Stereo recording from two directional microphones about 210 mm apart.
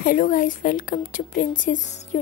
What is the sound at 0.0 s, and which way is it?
A woman's voice, 40° left (ahead or behind).